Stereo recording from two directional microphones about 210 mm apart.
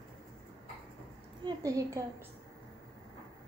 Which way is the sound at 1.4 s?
15° right (ahead or behind).